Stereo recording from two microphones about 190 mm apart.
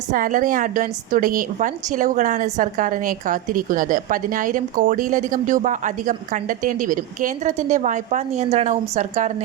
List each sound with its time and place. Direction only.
0.1 s a woman's voice: 45° right (ahead or behind)